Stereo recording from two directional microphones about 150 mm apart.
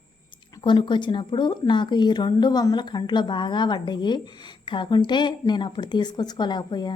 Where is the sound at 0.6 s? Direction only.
30° left (ahead or behind).